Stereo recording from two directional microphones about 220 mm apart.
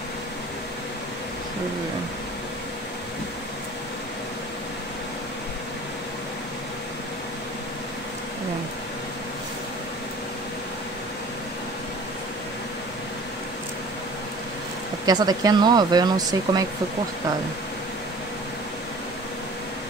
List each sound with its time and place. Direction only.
15.0 s speech: 15° right (ahead or behind)